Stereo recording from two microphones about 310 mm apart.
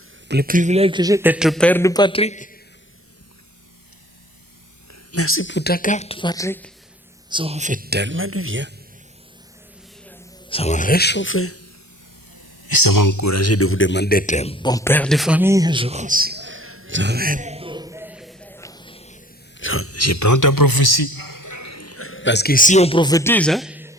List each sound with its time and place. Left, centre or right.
0.3 s a man's voice: right; by 2.6 s left
5.1 s a woman's voice: left; by 6.7 s centre
7.3 s speech: centre; by 8.7 s right
10.5 s speech: left
12.7 s a man's voice: left; by 19.2 s centre
19.5 s a man's voice: left; by 24.0 s centre